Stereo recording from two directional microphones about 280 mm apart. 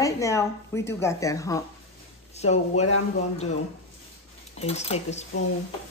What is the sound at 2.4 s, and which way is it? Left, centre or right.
Speech, left.